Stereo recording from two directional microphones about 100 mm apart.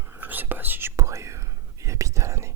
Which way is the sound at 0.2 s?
20° right (ahead or behind).